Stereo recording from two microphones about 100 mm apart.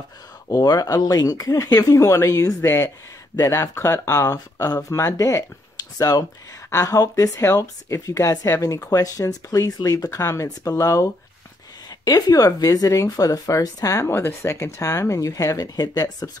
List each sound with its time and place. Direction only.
0.5 s speech: 35° left (ahead or behind)